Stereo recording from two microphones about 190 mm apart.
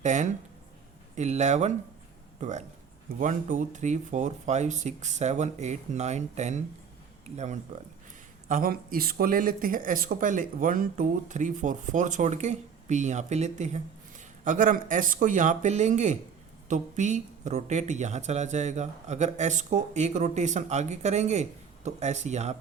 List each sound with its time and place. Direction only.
0.0 s speech: 40° right (ahead or behind)